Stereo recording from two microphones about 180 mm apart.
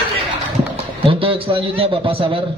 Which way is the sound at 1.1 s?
30° right (ahead or behind).